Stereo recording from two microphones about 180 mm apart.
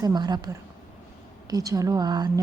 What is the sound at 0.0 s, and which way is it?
A woman's voice, 25° right (ahead or behind).